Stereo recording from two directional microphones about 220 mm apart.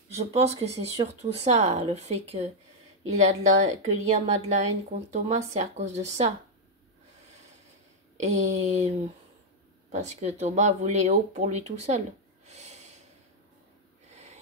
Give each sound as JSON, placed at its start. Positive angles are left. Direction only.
{"t": 0.2, "sound": "a woman's voice", "side_deg": -30}
{"t": 8.2, "sound": "a woman's voice", "side_deg": -30}
{"t": 12.4, "sound": "snort", "side_deg": -30}
{"t": 14.1, "sound": "snort", "side_deg": -30}